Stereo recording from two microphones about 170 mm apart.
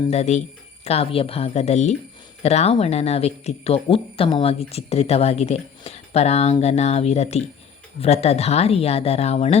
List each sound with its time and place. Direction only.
0.1 s speech: 40° left (ahead or behind)